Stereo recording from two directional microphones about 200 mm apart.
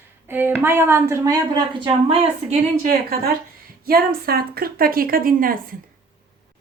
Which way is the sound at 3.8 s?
50° right (ahead or behind).